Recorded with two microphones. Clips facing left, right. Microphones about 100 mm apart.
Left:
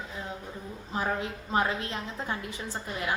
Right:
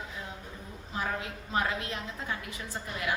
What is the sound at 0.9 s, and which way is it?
A woman's voice, 30° left (ahead or behind).